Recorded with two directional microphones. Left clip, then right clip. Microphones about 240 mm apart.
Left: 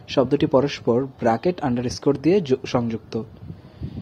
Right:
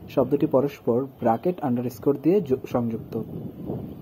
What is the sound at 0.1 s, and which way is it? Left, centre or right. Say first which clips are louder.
Speech: left 3 dB; left.